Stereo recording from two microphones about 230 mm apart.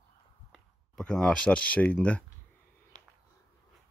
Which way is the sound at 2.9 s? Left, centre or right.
Left.